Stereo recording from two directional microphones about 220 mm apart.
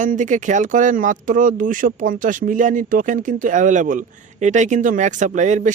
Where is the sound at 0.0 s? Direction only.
35° right (ahead or behind).